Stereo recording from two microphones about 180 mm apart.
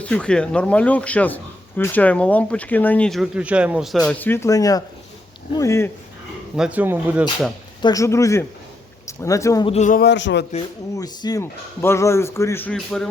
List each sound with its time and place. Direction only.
0.0 s a man's voice: 5° left (ahead or behind)
6.6 s speech: 10° right (ahead or behind)
7.8 s a man's voice: 20° left (ahead or behind)
9.6 s speech: 40° left (ahead or behind)
10.0 s speech: 80° left
10.9 s a man's voice: 20° left (ahead or behind); by 13.1 s 5° left (ahead or behind)